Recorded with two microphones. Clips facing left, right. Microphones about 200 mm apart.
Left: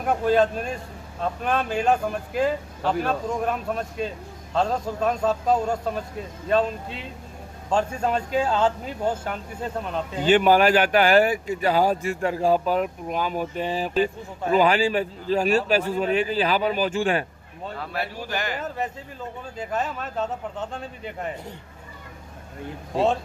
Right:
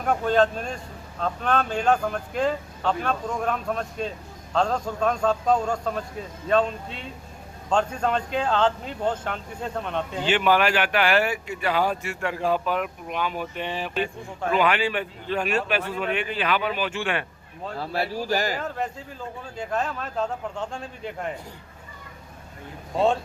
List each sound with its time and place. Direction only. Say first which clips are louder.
0.0 s speech: left 1 dB; 5° left (ahead or behind)
10.3 s a man's voice: left 4 dB; 40° left (ahead or behind)
17.7 s speech: right 4 dB; 35° right (ahead or behind)
19.5 s speech: even; 5° left (ahead or behind)